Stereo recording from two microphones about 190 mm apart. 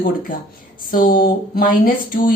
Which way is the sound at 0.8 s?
50° left (ahead or behind).